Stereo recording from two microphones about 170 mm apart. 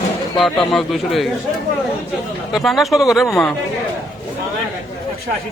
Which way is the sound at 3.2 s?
15° left (ahead or behind).